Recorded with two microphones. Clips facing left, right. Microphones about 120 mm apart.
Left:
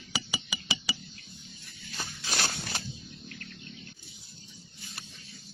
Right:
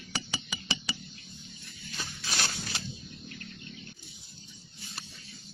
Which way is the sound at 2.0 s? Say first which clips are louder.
Left 2 dB; 40° left (ahead or behind).